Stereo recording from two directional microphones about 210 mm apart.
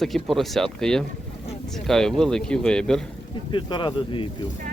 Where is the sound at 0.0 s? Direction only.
Centre (ahead or behind).